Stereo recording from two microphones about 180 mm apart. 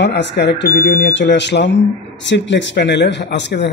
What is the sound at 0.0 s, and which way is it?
Speech, 70° left (ahead or behind).